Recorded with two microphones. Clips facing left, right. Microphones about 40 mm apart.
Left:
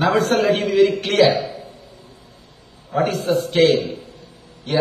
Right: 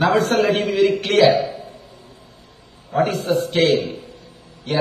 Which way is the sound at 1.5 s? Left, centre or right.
Right.